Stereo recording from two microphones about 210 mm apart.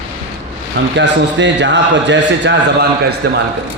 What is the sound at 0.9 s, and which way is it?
A man's voice, 55° right (ahead or behind).